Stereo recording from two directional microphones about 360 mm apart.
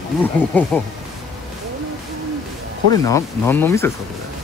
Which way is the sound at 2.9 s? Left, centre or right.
Centre.